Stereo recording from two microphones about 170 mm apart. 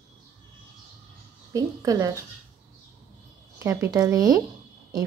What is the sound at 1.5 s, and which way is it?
Speech, 20° right (ahead or behind).